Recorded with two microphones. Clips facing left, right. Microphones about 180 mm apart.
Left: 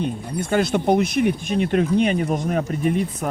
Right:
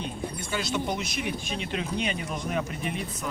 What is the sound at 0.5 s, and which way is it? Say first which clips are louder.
Speech: left 12 dB; 55° left (ahead or behind).